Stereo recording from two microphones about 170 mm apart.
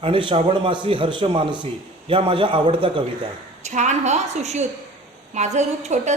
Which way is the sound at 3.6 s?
45° right (ahead or behind).